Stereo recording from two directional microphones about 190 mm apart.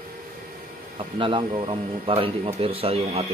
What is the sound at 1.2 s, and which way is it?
Speech, 25° right (ahead or behind).